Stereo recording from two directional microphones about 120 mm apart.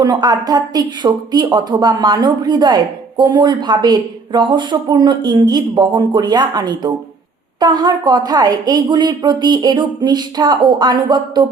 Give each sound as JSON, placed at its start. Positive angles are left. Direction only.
{"t": 0.0, "sound": "speech", "side_deg": -35}